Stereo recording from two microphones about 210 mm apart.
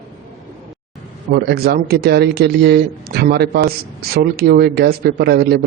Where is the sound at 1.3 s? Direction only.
50° right (ahead or behind).